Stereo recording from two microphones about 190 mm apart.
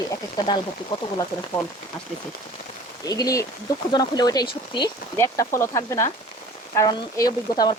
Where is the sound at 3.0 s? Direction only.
20° left (ahead or behind).